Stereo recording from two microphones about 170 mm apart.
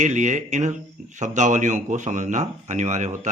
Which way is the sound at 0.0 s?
45° right (ahead or behind).